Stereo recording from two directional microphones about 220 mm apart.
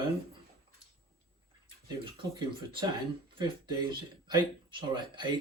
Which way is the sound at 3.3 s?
20° right (ahead or behind).